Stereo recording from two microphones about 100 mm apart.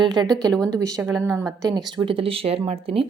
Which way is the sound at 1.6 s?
40° right (ahead or behind).